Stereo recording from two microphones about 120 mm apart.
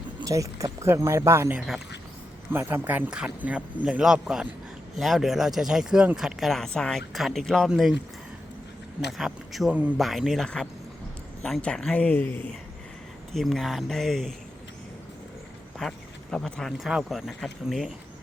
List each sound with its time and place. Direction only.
0.3 s speech: 25° right (ahead or behind)
1.5 s speech: 5° right (ahead or behind)
2.5 s speech: 20° right (ahead or behind); by 7.9 s centre (ahead or behind)
9.1 s speech: centre (ahead or behind); by 12.5 s 15° left (ahead or behind)
13.3 s speech: centre (ahead or behind)
15.8 s speech: 5° left (ahead or behind)